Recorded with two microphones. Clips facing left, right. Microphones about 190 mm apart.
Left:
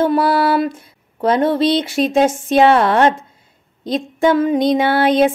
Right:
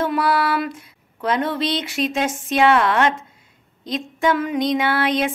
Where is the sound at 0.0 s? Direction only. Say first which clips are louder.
Left 5 dB; 30° left (ahead or behind).